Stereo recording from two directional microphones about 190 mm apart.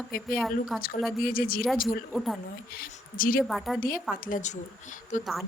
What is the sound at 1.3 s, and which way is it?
Speech, 50° left (ahead or behind).